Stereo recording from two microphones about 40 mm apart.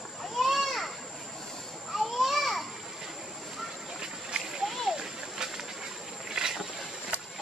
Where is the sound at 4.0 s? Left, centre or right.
Centre.